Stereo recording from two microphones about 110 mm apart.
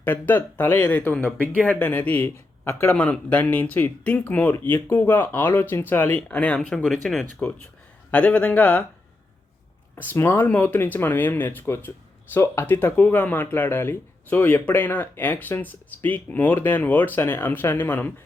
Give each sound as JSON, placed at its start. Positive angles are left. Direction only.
{"t": 0.0, "sound": "speech", "side_deg": 20}
{"t": 9.9, "sound": "speech", "side_deg": 20}